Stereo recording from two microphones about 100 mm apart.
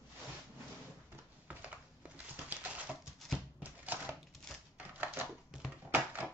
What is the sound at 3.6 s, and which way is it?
Typewriter, 15° right (ahead or behind).